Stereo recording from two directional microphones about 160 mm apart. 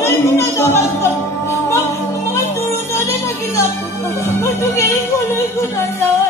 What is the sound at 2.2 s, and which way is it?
Music, 15° left (ahead or behind).